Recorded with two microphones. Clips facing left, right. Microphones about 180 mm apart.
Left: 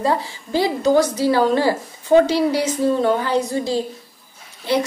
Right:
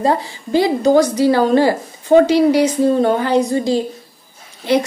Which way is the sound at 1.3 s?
50° right (ahead or behind).